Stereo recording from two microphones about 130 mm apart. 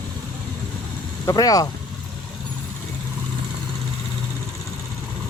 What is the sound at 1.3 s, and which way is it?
Speech, 30° left (ahead or behind).